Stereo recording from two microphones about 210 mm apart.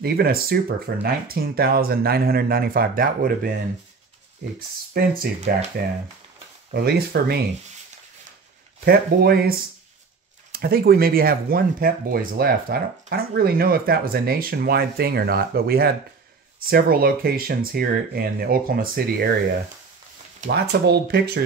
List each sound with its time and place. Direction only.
0.0 s speech: 45° right (ahead or behind)
4.9 s speech: 45° right (ahead or behind)
8.8 s speech: 45° right (ahead or behind)
20.4 s speech: 50° right (ahead or behind)